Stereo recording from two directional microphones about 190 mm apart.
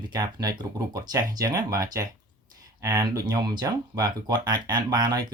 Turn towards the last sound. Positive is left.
turn(degrees=-20)  # may be behind; listen again after turning